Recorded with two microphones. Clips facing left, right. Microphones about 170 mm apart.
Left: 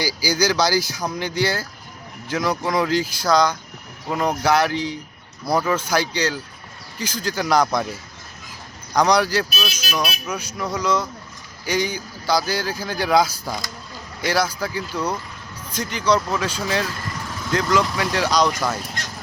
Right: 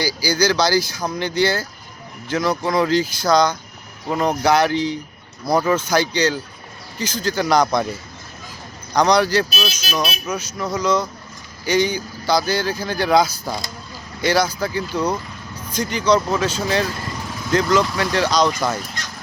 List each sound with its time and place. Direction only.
0.0 s speech: 15° left (ahead or behind)
5.5 s speech: 10° right (ahead or behind)
5.7 s speech: 5° left (ahead or behind)
9.0 s speech: 10° left (ahead or behind)
9.5 s speech: 30° right (ahead or behind)
10.6 s speech: 10° left (ahead or behind)